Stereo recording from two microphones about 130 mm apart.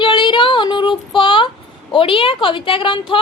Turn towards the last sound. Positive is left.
turn(degrees=40)  # may be behind; listen again after turning